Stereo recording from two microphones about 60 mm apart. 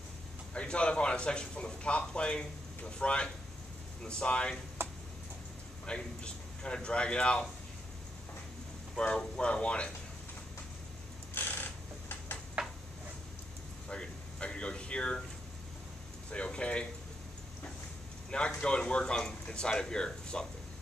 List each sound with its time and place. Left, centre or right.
0.6 s a man's voice: centre
4.8 s tick-tock: right
5.9 s a man's voice: centre
8.9 s speech: centre
11.3 s a sound: left
12.6 s tick-tock: centre
13.8 s air conditioning: centre
16.3 s a man's voice: centre
18.3 s a man's voice: centre